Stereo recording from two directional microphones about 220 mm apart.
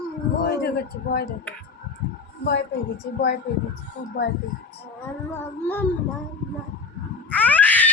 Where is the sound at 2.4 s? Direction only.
50° left (ahead or behind).